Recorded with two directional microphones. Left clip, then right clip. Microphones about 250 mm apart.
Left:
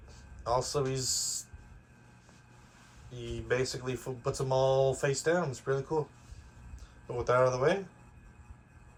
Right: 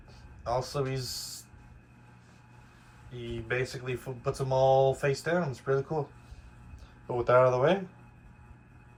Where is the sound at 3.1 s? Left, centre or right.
Centre.